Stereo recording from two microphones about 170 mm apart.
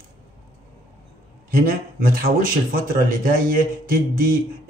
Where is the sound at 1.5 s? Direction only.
60° right (ahead or behind).